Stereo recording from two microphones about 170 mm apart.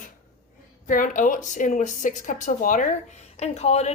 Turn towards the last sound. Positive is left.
turn(degrees=40)  # may be behind; listen again after turning